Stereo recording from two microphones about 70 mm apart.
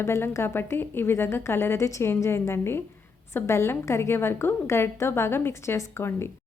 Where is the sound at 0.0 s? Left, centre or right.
Left.